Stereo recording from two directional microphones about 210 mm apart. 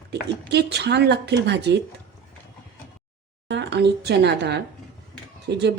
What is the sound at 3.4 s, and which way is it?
A woman's voice, 55° right (ahead or behind).